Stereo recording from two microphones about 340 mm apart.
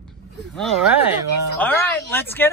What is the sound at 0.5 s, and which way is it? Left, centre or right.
Speech, centre.